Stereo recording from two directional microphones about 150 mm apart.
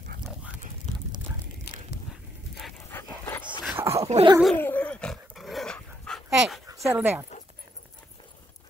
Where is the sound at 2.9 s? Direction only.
15° left (ahead or behind).